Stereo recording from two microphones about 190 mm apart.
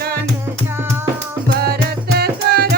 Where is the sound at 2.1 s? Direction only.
55° right (ahead or behind).